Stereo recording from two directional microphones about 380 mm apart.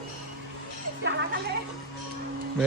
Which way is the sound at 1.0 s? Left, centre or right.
Right.